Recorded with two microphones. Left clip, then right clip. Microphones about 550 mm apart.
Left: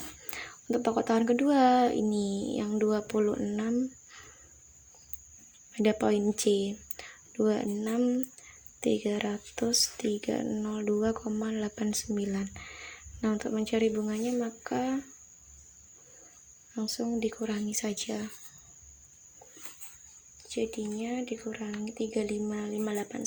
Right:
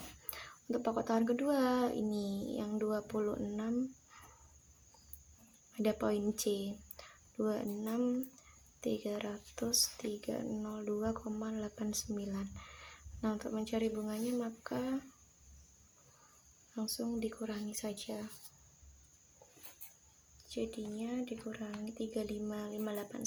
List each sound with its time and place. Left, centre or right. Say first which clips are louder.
0.3 s speech: left 8 dB; right
5.7 s speech: left 8 dB; right
16.7 s speech: left 7 dB; right
20.5 s speech: left 8 dB; right